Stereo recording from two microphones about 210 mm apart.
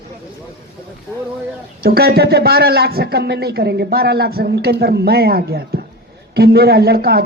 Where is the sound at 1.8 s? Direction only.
45° right (ahead or behind).